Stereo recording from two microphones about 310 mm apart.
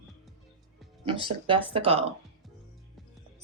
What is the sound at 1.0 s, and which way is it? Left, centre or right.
Speech, centre.